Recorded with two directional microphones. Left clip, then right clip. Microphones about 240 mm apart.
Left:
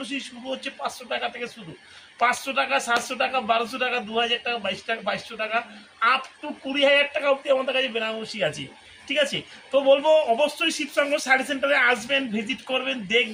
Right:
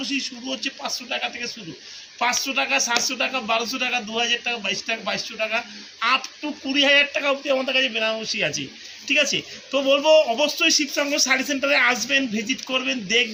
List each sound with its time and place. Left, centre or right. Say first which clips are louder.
0.0 s speech: right 5 dB; centre